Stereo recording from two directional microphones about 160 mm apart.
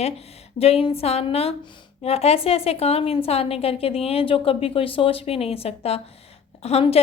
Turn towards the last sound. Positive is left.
turn(degrees=40)  # may be behind; listen again after turning